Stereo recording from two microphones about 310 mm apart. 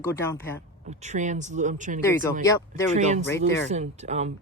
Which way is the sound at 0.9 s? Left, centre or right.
Right.